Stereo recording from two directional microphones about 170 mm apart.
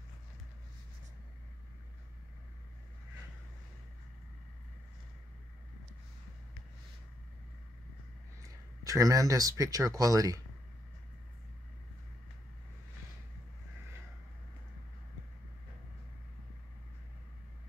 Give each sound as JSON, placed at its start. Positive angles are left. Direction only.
{"t": 8.4, "sound": "speech", "side_deg": -20}